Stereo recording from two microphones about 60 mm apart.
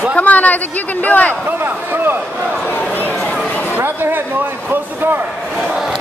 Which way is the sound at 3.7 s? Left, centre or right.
Right.